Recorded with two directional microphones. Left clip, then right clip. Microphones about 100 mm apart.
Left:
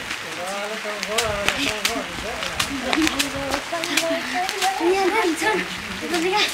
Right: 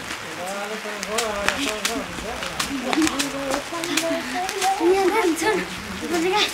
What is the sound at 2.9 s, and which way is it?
A woman's voice, 10° right (ahead or behind).